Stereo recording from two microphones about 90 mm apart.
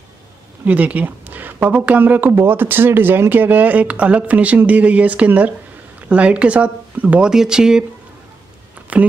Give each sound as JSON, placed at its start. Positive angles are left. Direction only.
{"t": 0.7, "sound": "speech", "side_deg": -15}